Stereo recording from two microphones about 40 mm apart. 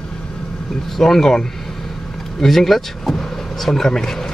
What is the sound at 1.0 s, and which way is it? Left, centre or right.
Speech, centre.